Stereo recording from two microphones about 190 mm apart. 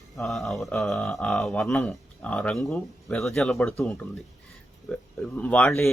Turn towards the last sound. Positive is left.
turn(degrees=5)  # may be behind; listen again after turning